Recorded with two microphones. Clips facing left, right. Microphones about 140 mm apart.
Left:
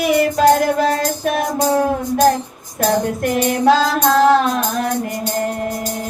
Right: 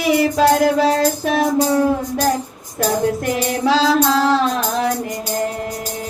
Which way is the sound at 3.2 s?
50° left (ahead or behind).